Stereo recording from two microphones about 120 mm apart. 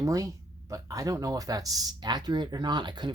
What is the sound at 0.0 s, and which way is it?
Speech, 30° right (ahead or behind).